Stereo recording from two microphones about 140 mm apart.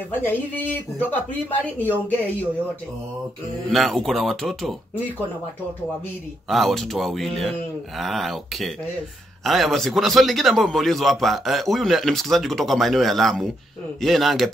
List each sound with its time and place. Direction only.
0.1 s speech: 15° left (ahead or behind)
3.7 s a man's voice: centre (ahead or behind)
6.5 s a man's voice: centre (ahead or behind)